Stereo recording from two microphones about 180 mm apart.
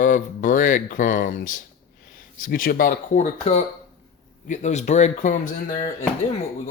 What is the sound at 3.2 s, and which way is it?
Speech, 40° left (ahead or behind).